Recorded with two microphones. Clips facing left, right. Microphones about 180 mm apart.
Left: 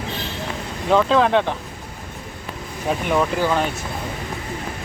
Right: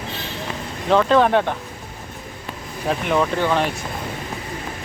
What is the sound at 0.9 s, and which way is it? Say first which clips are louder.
Speech: right 1 dB; centre (ahead or behind).